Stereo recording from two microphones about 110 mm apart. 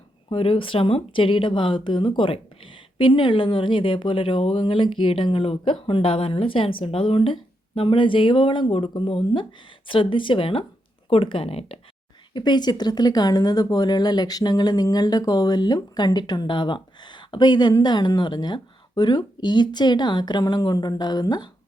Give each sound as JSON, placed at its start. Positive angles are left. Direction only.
{"t": 0.3, "sound": "speech", "side_deg": 55}
{"t": 12.3, "sound": "speech", "side_deg": 40}